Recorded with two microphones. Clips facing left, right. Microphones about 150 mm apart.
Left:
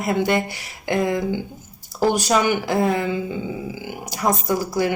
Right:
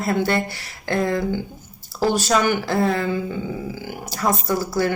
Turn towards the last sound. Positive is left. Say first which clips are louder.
# even
turn(degrees=15)  # may be behind; listen again after turning